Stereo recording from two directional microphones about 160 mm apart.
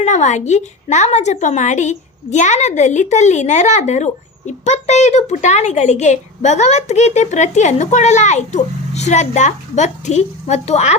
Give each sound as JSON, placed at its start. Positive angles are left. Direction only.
{"t": 0.0, "sound": "a woman's voice", "side_deg": 50}